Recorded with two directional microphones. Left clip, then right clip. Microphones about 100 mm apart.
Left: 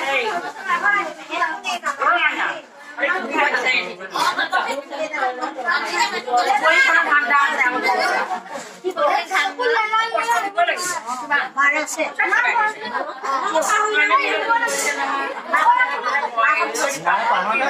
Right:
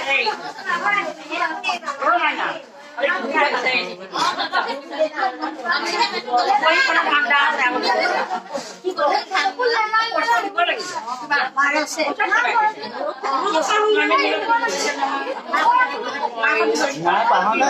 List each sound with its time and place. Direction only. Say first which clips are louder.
0.0 s speech: right 1 dB; 30° right (ahead or behind)
2.1 s a woman's voice: left 1 dB; 30° right (ahead or behind)